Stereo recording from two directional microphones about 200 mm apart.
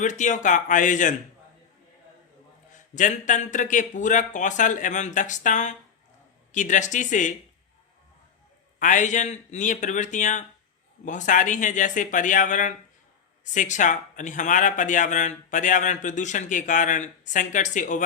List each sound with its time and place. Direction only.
0.0 s speech: 40° left (ahead or behind)
2.7 s speech: 40° left (ahead or behind)
8.8 s speech: 40° left (ahead or behind)